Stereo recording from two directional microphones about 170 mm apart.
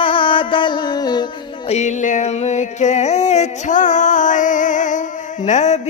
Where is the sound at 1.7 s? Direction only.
45° left (ahead or behind).